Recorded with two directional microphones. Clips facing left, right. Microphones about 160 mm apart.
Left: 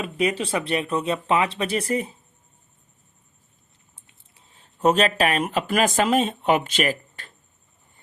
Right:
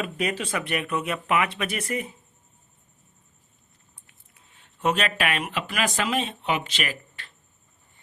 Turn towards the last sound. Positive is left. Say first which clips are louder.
# left 7 dB
turn(degrees=45)  # may be behind; listen again after turning